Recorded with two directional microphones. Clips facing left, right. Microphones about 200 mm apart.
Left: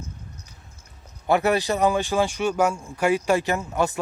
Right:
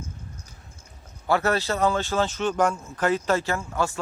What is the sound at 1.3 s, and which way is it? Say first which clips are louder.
Speech: left 3 dB; 15° left (ahead or behind).